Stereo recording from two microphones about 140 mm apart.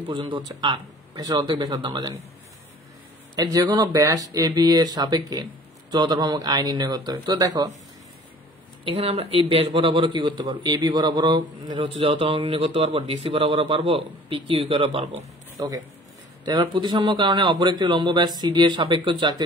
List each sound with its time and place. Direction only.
0.1 s a man's voice: 35° right (ahead or behind)
3.5 s speech: 30° right (ahead or behind)
8.8 s a man's voice: 45° right (ahead or behind)
15.5 s a man's voice: 25° right (ahead or behind)